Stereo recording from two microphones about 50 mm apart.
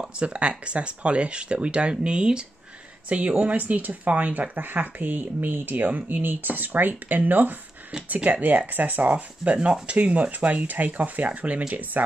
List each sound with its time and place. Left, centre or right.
0.0 s speech: right